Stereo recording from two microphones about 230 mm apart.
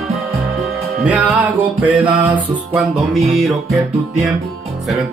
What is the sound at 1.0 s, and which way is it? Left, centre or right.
Music, centre.